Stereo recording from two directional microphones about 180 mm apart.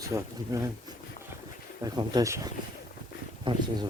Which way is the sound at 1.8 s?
20° right (ahead or behind).